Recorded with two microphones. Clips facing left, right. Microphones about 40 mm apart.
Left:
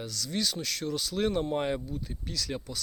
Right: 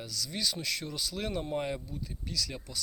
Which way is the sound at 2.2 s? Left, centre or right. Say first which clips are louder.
Right 1 dB; centre.